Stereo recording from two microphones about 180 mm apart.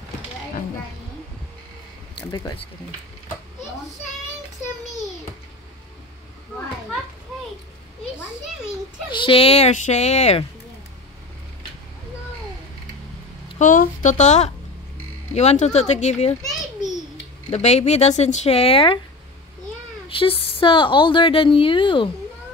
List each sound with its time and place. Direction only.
2.1 s speech: 25° left (ahead or behind)
9.1 s speech: 30° left (ahead or behind)
13.6 s speech: 45° left (ahead or behind)
17.5 s speech: 40° left (ahead or behind)
20.1 s a woman's voice: 30° left (ahead or behind)